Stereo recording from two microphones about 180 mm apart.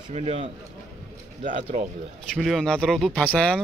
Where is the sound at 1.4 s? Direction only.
45° right (ahead or behind).